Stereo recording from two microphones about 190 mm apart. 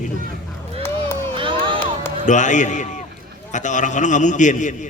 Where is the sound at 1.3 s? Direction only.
25° right (ahead or behind).